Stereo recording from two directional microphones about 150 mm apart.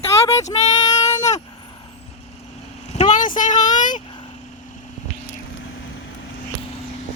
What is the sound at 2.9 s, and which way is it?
Vehicle, 50° left (ahead or behind).